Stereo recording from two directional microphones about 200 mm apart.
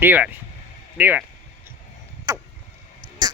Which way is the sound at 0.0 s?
10° right (ahead or behind).